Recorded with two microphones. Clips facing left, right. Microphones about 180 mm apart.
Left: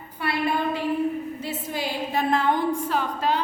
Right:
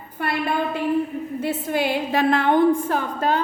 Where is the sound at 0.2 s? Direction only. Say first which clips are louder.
Right 2 dB; 50° right (ahead or behind).